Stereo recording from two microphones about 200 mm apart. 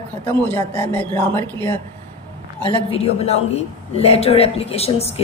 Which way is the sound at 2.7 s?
30° left (ahead or behind).